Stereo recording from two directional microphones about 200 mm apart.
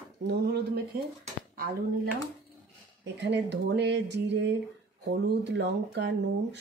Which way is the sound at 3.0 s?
60° right (ahead or behind).